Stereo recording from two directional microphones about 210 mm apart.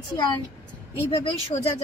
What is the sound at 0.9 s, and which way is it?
Speech, 30° left (ahead or behind).